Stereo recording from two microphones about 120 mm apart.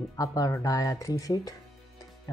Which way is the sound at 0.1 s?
30° left (ahead or behind).